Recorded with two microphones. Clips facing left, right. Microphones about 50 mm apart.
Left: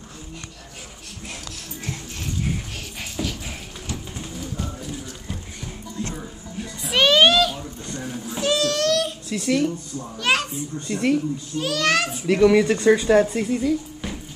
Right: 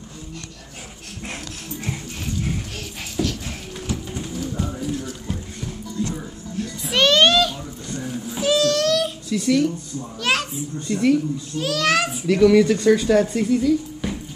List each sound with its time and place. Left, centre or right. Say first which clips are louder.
3.2 s dog: right 5 dB; centre
3.8 s a sound: right 5 dB; centre
4.7 s music: right 6 dB; centre
9.3 s speech: right 3 dB; left
10.1 s babbling: left 1 dB; centre
10.9 s speech: right 3 dB; centre
11.5 s a child's voice: right 1 dB; centre
12.3 s speech: right 1 dB; centre